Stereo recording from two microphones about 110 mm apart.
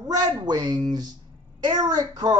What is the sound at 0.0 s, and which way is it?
A woman's voice, 40° right (ahead or behind).